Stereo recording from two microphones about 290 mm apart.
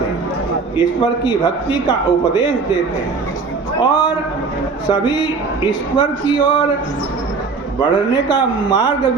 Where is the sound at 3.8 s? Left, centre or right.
Centre.